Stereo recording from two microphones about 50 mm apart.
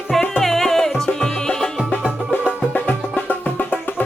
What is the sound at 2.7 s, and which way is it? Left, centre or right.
Music, left.